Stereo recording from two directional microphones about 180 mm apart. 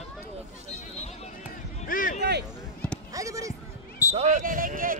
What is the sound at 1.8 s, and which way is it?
Speech, 50° left (ahead or behind).